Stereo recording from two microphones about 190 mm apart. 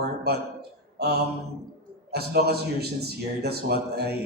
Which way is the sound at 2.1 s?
55° right (ahead or behind).